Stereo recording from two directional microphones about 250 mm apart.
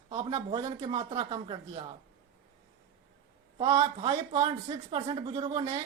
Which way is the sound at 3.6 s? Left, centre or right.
Centre.